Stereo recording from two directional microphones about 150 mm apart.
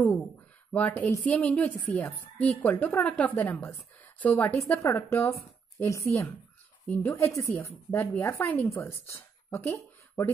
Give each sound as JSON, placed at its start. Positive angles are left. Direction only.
{"t": 0.7, "sound": "a woman's voice", "side_deg": 10}